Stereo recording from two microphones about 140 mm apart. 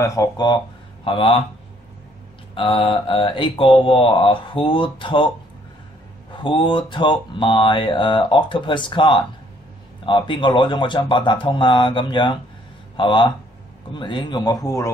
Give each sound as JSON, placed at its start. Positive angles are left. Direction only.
{"t": 0.0, "sound": "a man's voice", "side_deg": 25}
{"t": 1.0, "sound": "speech", "side_deg": 40}
{"t": 2.5, "sound": "speech", "side_deg": 40}
{"t": 6.3, "sound": "a man's voice", "side_deg": 35}